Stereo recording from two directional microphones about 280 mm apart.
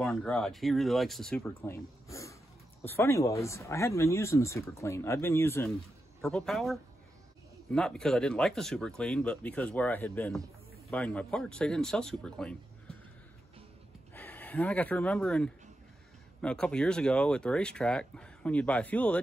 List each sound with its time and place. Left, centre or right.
0.0 s speech: centre
14.1 s speech: centre